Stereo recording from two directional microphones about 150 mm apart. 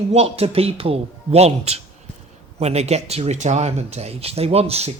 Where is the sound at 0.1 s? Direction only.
40° right (ahead or behind).